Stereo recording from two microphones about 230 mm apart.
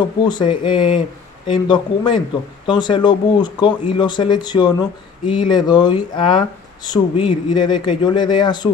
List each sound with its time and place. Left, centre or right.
0.0 s speech: centre